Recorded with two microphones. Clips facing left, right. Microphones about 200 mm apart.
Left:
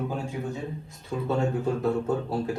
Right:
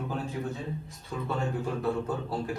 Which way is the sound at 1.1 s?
15° left (ahead or behind).